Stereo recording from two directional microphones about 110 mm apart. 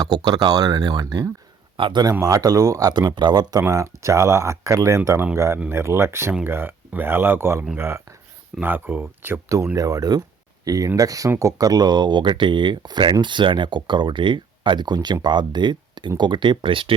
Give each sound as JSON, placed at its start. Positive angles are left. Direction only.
{"t": 0.0, "sound": "a man's voice", "side_deg": -40}
{"t": 3.2, "sound": "speech", "side_deg": -40}
{"t": 3.6, "sound": "speech", "side_deg": -30}